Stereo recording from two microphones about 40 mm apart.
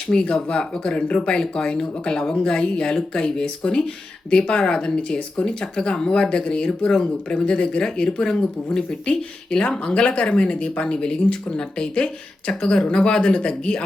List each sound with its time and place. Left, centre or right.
0.1 s speech: centre
7.4 s speech: left